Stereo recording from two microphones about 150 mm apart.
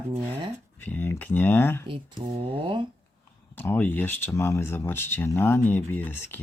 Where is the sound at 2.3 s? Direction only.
40° right (ahead or behind).